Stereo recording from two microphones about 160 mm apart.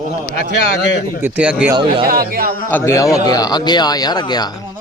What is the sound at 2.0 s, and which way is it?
Speech, 70° right (ahead or behind).